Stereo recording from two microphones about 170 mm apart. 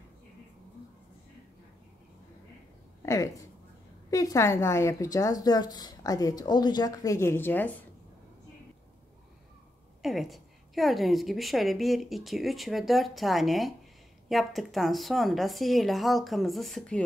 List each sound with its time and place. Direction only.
3.0 s a sound: 15° left (ahead or behind)
4.1 s a woman's voice: 20° left (ahead or behind)
10.0 s a woman's voice: centre (ahead or behind)